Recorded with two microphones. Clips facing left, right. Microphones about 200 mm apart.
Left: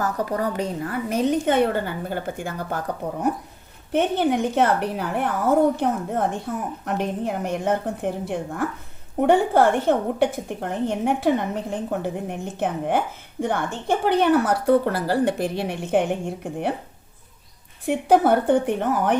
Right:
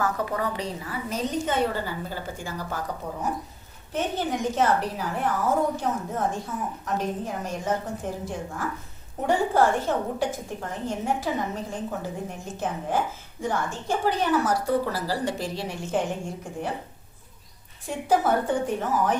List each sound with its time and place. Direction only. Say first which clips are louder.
0.0 s a woman's voice: left 3 dB; 40° left (ahead or behind); by 2.8 s 55° left (ahead or behind)
3.9 s a woman's voice: left 7 dB; 65° left (ahead or behind)
17.8 s a woman's voice: left 6 dB; 65° left (ahead or behind)